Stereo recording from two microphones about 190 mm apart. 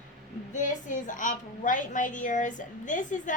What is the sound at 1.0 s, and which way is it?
A woman's voice, 45° left (ahead or behind).